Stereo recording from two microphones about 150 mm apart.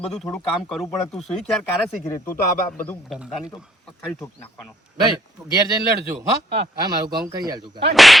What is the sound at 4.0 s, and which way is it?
Speech, 20° left (ahead or behind).